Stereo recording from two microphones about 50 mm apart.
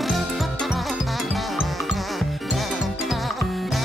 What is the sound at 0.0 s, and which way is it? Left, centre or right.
Music, centre.